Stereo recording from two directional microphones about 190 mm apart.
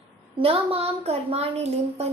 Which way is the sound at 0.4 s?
30° right (ahead or behind).